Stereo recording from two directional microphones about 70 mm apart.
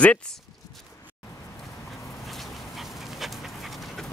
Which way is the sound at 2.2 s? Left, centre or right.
Centre.